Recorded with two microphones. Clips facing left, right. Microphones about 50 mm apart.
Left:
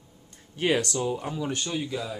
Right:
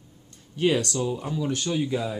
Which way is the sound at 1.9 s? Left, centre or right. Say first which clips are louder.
Right 4 dB; centre.